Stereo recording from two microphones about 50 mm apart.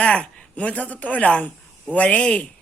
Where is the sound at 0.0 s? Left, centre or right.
Left.